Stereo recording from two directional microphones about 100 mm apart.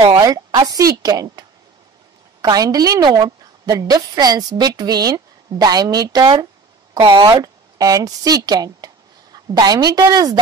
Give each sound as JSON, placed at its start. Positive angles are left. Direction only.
{"t": 0.2, "sound": "a woman's voice", "side_deg": -40}
{"t": 2.4, "sound": "a woman's voice", "side_deg": -40}
{"t": 7.2, "sound": "speech", "side_deg": -40}